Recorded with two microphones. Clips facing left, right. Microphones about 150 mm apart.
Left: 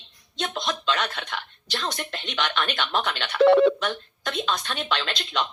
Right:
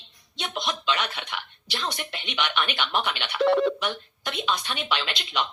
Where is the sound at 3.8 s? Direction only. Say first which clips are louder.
Left 2 dB; 10° right (ahead or behind).